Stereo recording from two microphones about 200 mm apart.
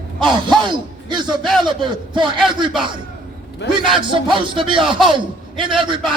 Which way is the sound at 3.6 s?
60° left (ahead or behind).